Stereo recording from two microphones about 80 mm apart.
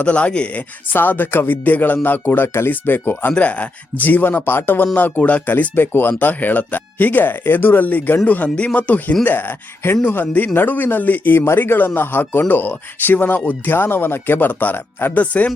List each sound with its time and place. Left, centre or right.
0.0 s speech: centre